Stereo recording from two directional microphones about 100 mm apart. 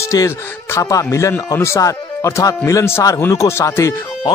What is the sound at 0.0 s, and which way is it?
Speech, 30° left (ahead or behind).